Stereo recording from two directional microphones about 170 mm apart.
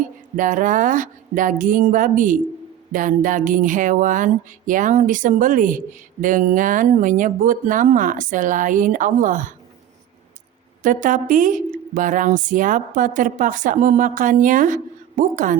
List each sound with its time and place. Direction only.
0.3 s speech: 50° right (ahead or behind)
10.8 s speech: 50° right (ahead or behind)